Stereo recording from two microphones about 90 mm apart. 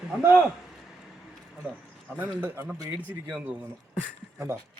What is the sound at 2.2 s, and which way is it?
A man's voice, 20° right (ahead or behind).